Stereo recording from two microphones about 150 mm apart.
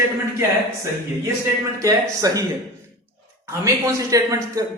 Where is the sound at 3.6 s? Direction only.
20° right (ahead or behind).